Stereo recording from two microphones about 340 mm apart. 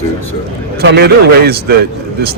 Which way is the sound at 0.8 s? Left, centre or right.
Right.